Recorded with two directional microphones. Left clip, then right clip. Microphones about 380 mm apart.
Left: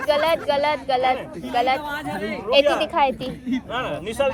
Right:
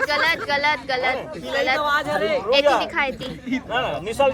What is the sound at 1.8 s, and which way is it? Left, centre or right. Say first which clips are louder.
Speech: right 7 dB; centre.